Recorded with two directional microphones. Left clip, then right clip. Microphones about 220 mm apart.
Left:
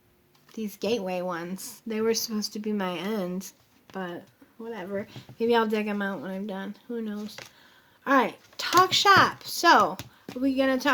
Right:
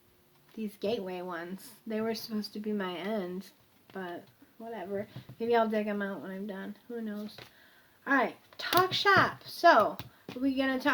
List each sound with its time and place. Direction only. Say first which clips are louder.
0.5 s a woman's voice: left 5 dB; 45° left (ahead or behind)